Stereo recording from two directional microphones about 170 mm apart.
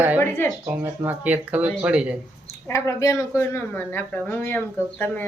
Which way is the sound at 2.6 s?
15° left (ahead or behind).